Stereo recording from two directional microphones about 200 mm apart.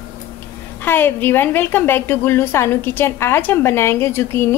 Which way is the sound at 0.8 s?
10° left (ahead or behind).